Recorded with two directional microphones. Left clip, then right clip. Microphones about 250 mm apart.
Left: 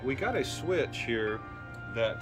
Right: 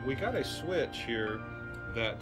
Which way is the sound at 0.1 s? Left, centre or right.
Centre.